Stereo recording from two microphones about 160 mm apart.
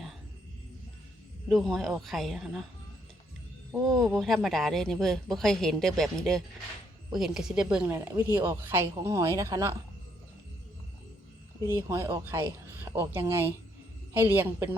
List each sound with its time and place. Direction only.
1.5 s speech: centre (ahead or behind)
3.8 s speech: centre (ahead or behind); by 9.7 s 20° right (ahead or behind)
11.7 s speech: 15° right (ahead or behind)